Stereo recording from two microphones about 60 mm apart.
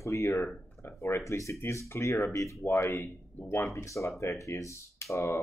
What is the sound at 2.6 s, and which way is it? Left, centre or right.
Speech, left.